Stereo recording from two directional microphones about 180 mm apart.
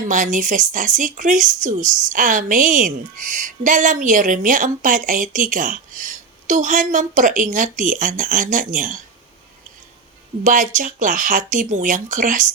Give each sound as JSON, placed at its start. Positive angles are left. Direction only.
{"t": 0.1, "sound": "speech", "side_deg": -45}
{"t": 10.4, "sound": "speech", "side_deg": -45}